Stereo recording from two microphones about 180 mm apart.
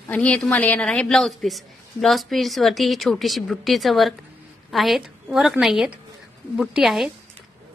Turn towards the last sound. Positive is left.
turn(degrees=0)  # may be behind; listen again after turning